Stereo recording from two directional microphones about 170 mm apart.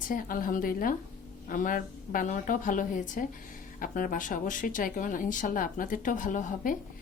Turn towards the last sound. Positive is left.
turn(degrees=50)  # may be behind; listen again after turning